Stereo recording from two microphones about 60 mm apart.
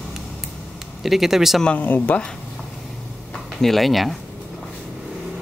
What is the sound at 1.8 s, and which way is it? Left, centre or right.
Speech, left.